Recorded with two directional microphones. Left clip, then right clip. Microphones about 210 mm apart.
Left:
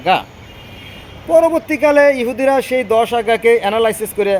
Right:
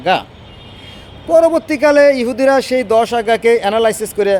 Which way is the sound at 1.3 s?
15° right (ahead or behind).